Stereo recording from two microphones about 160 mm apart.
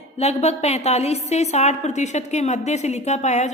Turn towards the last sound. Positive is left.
turn(degrees=45)  # may be behind; listen again after turning